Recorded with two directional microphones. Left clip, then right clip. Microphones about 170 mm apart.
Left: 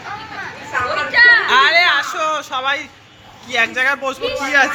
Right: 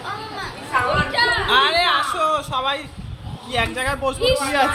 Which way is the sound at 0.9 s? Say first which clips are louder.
Left 10 dB; 30° right (ahead or behind).